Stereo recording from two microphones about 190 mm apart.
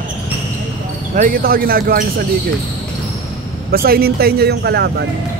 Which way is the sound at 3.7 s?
50° right (ahead or behind).